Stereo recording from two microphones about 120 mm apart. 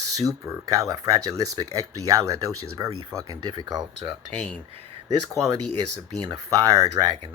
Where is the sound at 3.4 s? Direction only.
35° right (ahead or behind).